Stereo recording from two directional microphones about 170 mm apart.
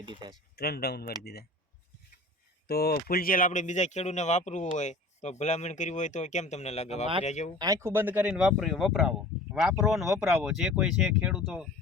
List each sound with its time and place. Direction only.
0.1 s speech: 25° right (ahead or behind)
0.5 s speech: 65° left (ahead or behind)
2.6 s speech: 65° left (ahead or behind); by 7.5 s 45° left (ahead or behind)
7.6 s speech: 20° right (ahead or behind)